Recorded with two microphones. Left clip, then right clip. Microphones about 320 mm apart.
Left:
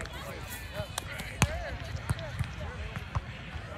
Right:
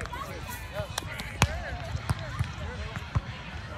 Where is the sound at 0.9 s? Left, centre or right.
Centre.